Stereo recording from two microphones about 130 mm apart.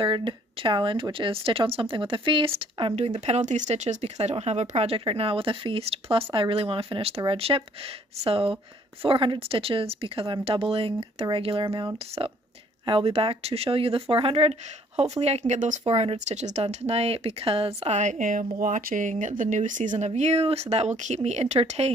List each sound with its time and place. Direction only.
0.0 s speech: 40° right (ahead or behind); by 15.8 s 70° right (ahead or behind)
15.8 s speech: 50° right (ahead or behind)
16.6 s speech: 50° right (ahead or behind); by 20.1 s 75° right (ahead or behind)
20.1 s speech: 60° right (ahead or behind)